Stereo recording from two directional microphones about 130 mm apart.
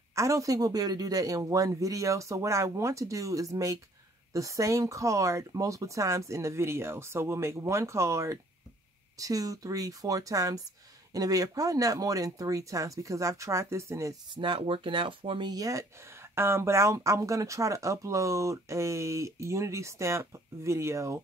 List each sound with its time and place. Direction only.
0.1 s speech: 25° right (ahead or behind)
14.3 s speech: 40° right (ahead or behind); by 21.2 s 20° right (ahead or behind)